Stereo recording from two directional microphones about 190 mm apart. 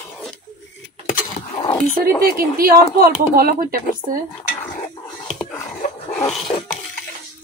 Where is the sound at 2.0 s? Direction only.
50° right (ahead or behind).